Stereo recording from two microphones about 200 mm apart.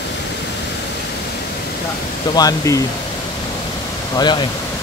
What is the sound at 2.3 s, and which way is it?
Speech, 15° left (ahead or behind).